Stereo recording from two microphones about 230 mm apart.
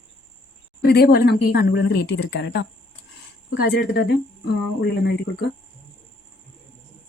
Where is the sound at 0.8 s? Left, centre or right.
Left.